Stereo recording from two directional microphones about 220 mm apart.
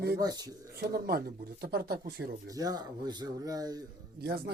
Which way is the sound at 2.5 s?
15° right (ahead or behind).